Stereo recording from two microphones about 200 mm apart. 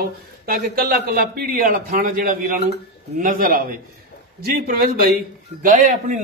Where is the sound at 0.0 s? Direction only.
50° right (ahead or behind).